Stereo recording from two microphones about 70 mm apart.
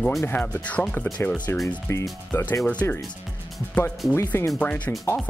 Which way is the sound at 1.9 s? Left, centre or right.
Left.